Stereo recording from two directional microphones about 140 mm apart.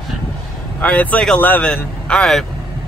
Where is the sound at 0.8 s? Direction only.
10° left (ahead or behind).